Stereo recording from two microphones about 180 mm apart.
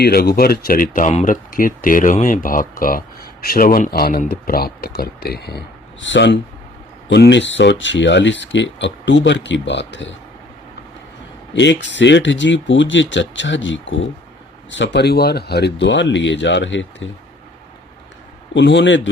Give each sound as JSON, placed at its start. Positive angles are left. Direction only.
{"t": 0.0, "sound": "speech", "side_deg": 60}
{"t": 11.5, "sound": "speech", "side_deg": 80}
{"t": 14.7, "sound": "speech", "side_deg": 80}
{"t": 18.5, "sound": "speech", "side_deg": 90}